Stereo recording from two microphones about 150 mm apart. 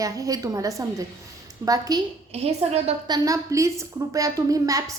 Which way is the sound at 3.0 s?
25° right (ahead or behind).